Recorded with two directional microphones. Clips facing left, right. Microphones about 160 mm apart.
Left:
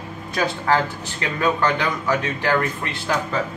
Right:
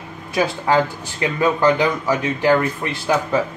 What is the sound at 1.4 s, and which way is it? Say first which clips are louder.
Speech: right 4 dB; 10° right (ahead or behind).